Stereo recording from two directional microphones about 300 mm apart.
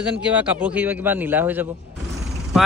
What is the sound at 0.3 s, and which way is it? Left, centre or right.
A man's voice, centre.